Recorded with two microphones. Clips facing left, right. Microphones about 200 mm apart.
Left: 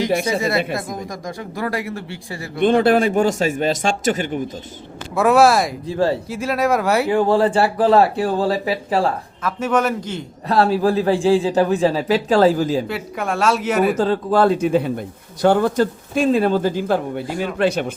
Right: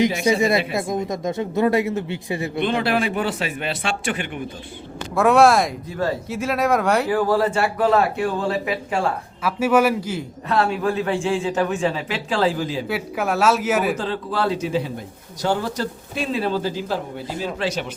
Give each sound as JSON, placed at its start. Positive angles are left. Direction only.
{"t": 0.3, "sound": "speech", "side_deg": -20}
{"t": 2.6, "sound": "speech", "side_deg": 45}
{"t": 5.1, "sound": "speech", "side_deg": 0}
{"t": 5.9, "sound": "speech", "side_deg": 30}
{"t": 6.2, "sound": "speech", "side_deg": 0}
{"t": 7.1, "sound": "a man's voice", "side_deg": 25}
{"t": 9.4, "sound": "a man's voice", "side_deg": -10}
{"t": 10.5, "sound": "a man's voice", "side_deg": 35}
{"t": 12.9, "sound": "speech", "side_deg": -5}
{"t": 13.9, "sound": "speech", "side_deg": 45}